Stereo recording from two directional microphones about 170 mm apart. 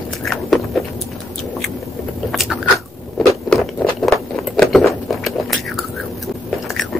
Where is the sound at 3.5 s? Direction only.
5° left (ahead or behind).